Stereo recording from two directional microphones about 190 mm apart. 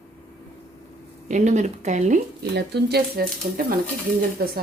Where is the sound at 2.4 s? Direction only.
55° right (ahead or behind).